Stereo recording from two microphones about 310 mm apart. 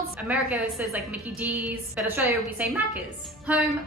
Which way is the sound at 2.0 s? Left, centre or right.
Centre.